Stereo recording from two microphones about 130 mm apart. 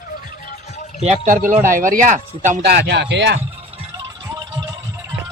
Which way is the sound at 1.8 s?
75° right (ahead or behind).